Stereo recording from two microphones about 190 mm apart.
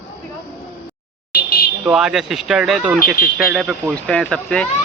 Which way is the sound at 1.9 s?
5° right (ahead or behind).